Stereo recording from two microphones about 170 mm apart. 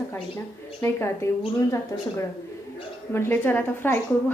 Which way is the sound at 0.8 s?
15° left (ahead or behind).